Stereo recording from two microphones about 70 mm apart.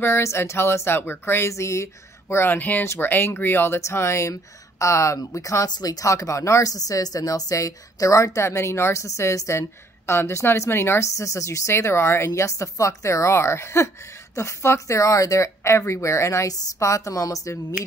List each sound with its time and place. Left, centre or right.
0.0 s speech: left
2.8 s speech: left
3.1 s a woman's voice: left
5.7 s speech: left
6.7 s a woman's voice: left
11.1 s a woman's voice: left